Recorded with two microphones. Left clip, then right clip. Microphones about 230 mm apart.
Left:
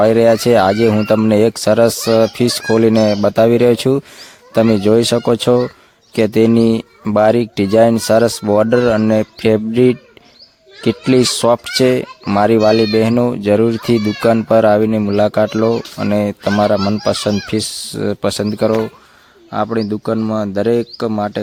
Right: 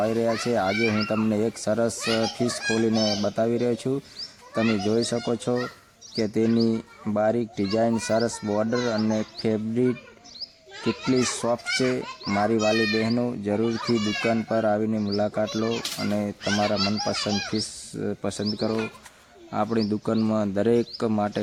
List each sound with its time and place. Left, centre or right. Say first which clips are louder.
0.0 s speech: left 14 dB; left
19.5 s speech: left 8 dB; left